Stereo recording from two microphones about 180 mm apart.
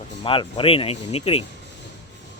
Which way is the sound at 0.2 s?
30° left (ahead or behind).